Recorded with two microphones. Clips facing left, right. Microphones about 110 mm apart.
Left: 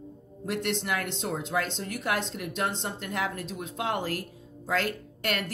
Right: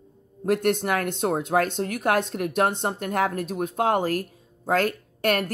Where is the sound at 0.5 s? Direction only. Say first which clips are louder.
Right 8 dB; 50° right (ahead or behind).